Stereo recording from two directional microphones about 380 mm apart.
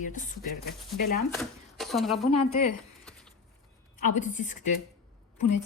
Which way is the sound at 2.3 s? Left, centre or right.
Left.